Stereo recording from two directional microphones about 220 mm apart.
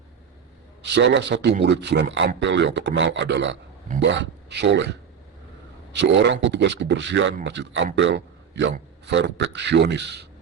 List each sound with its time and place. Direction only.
0.8 s speech: 55° right (ahead or behind)
5.9 s a man's voice: 55° right (ahead or behind)